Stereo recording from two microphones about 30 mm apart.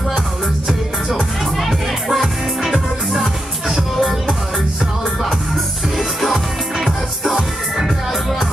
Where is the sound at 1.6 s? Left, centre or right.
Centre.